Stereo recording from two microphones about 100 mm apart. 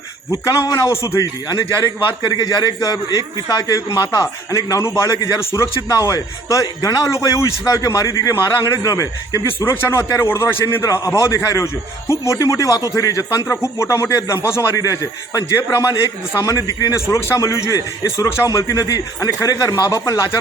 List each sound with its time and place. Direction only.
0.3 s a man's voice: 35° left (ahead or behind)
10.8 s speech: 35° left (ahead or behind)
11.1 s a man's voice: 25° left (ahead or behind)